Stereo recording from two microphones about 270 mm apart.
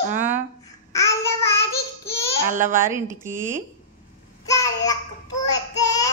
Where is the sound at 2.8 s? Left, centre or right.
Centre.